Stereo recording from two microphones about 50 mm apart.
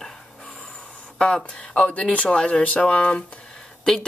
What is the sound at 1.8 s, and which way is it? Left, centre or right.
Speech, left.